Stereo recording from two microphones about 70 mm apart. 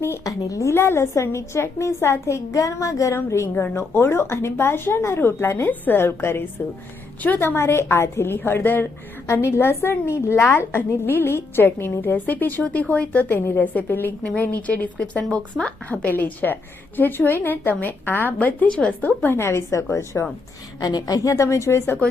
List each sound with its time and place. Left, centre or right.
0.3 s a woman's voice: left
0.7 s a woman's voice: left
9.2 s a woman's voice: left
18.7 s a woman's voice: centre
19.0 s a woman's voice: left
20.7 s a woman's voice: left
21.3 s a woman's voice: left